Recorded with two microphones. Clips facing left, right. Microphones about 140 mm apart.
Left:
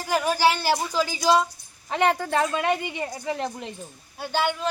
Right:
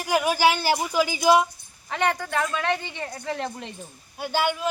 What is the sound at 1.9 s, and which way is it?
Speech, 25° left (ahead or behind).